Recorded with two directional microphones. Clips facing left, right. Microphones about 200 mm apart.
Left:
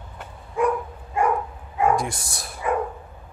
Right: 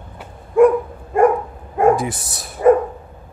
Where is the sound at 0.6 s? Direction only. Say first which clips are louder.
Right 11 dB; 55° right (ahead or behind).